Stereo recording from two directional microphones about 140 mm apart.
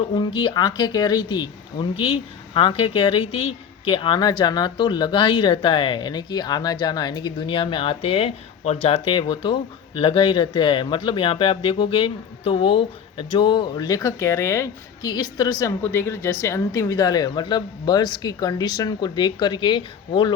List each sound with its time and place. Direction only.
0.0 s speech: 40° left (ahead or behind)